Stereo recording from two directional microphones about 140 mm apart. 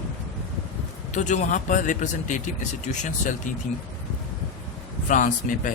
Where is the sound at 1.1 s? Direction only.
55° left (ahead or behind).